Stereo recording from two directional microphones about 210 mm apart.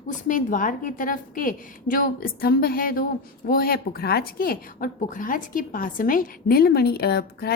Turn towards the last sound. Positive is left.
turn(degrees=50)  # may be behind; listen again after turning